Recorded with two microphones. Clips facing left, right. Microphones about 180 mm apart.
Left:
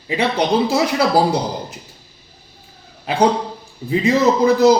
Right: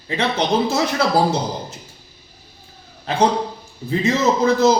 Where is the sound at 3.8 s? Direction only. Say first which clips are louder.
Left 3 dB; 15° left (ahead or behind).